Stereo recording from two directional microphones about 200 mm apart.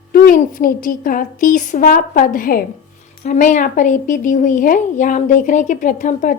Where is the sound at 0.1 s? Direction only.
45° left (ahead or behind).